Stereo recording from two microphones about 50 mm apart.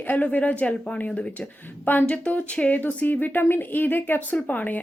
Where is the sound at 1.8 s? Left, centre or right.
Left.